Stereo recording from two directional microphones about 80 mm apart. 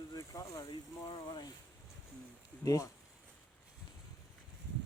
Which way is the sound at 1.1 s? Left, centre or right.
Left.